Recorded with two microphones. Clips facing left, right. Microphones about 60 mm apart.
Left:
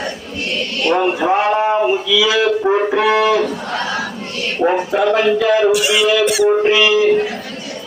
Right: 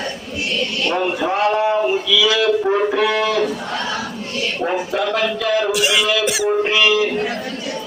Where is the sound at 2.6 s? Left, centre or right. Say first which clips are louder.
Left 2 dB; centre.